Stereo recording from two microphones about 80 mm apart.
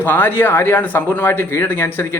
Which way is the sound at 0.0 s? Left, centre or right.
Left.